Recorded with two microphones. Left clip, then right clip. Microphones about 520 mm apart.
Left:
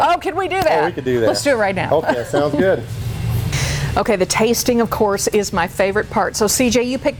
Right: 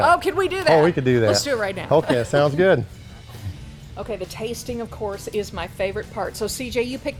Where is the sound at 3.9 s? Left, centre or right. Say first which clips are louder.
Left 13 dB; left.